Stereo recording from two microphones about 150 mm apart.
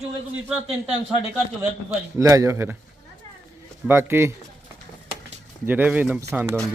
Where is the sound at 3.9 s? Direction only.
15° right (ahead or behind).